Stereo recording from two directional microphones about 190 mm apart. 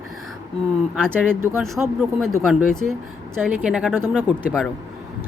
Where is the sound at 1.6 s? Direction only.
Centre (ahead or behind).